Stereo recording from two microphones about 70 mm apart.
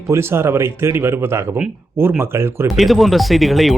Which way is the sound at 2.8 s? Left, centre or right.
Centre.